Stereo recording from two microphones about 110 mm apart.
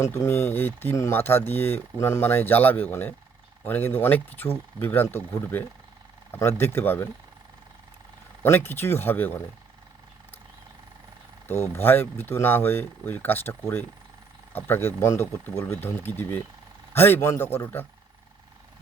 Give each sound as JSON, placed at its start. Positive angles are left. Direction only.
{"t": 0.0, "sound": "speech", "side_deg": 20}
{"t": 8.4, "sound": "speech", "side_deg": 20}
{"t": 11.4, "sound": "speech", "side_deg": 20}